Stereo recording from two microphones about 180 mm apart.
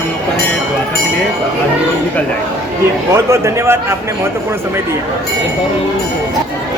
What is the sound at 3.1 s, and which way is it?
Speech, 15° right (ahead or behind).